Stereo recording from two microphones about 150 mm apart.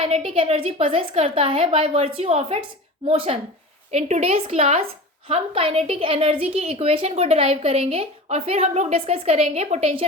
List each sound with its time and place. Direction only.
0.0 s a woman's voice: 45° right (ahead or behind)